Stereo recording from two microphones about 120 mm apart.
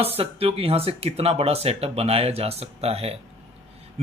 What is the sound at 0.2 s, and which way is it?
Speech, 55° right (ahead or behind).